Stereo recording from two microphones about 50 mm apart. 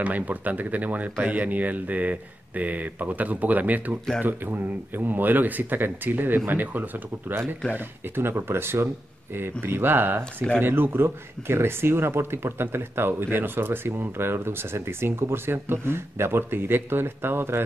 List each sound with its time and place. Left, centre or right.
0.0 s speech: right